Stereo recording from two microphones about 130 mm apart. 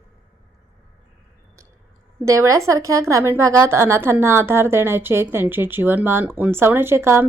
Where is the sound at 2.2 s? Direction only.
20° right (ahead or behind).